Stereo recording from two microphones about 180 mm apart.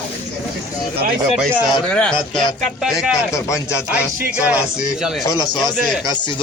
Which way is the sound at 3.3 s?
15° left (ahead or behind).